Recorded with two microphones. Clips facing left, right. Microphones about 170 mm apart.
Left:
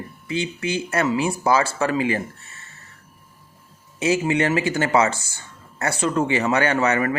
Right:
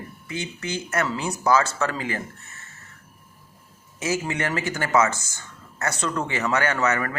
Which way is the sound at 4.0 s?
15° left (ahead or behind).